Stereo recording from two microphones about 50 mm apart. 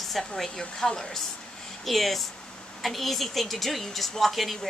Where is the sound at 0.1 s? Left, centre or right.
Centre.